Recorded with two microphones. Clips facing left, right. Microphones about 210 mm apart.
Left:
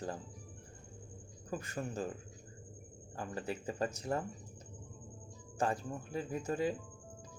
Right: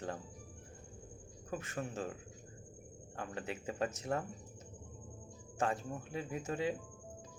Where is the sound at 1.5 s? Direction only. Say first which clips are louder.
Left 1 dB; centre (ahead or behind).